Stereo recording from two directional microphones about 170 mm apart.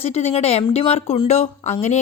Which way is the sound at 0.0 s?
35° left (ahead or behind).